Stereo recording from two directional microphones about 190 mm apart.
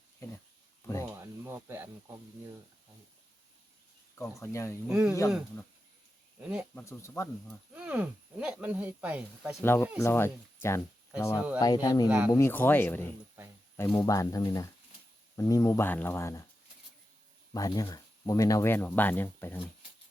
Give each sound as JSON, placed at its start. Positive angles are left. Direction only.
{"t": 1.1, "sound": "sizzle", "side_deg": -10}
{"t": 4.1, "sound": "speech", "side_deg": 15}
{"t": 4.9, "sound": "speech", "side_deg": -5}
{"t": 6.4, "sound": "speech", "side_deg": -5}
{"t": 6.7, "sound": "speech", "side_deg": 10}
{"t": 7.7, "sound": "speech", "side_deg": -5}
{"t": 9.6, "sound": "speech", "side_deg": 15}
{"t": 12.0, "sound": "speech", "side_deg": -5}
{"t": 12.3, "sound": "speech", "side_deg": 10}
{"t": 17.5, "sound": "speech", "side_deg": 20}